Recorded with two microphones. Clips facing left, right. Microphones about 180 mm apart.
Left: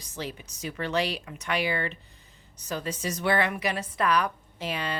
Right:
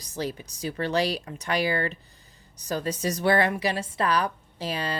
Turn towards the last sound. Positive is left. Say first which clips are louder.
# right 2 dB
turn(degrees=-35)  # may be behind; listen again after turning